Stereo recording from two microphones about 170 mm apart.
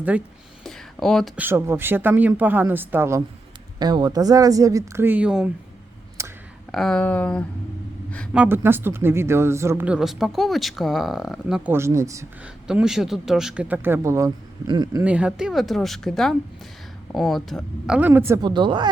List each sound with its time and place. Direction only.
0.1 s speech: 5° right (ahead or behind)
0.6 s a sound: centre (ahead or behind)
1.4 s speech: 15° right (ahead or behind)
6.2 s clicking: 15° right (ahead or behind)
6.7 s speech: centre (ahead or behind)
8.3 s speech: 10° right (ahead or behind)
11.7 s speech: 15° right (ahead or behind)
12.6 s speech: 5° right (ahead or behind); by 15.0 s 25° right (ahead or behind)
15.0 s speech: 5° right (ahead or behind)
18.4 s speech: 30° right (ahead or behind)